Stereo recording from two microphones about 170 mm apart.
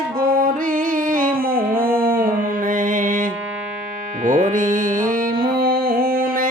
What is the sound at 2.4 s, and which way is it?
Mantra, 50° right (ahead or behind).